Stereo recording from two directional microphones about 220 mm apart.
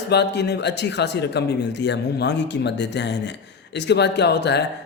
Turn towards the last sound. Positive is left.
turn(degrees=50)  # may be behind; listen again after turning